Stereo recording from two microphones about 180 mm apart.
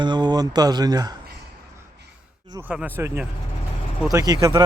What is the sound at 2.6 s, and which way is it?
Speech, 10° right (ahead or behind).